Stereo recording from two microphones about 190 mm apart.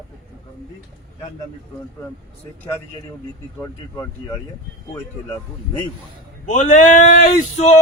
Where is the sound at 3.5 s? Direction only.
15° left (ahead or behind).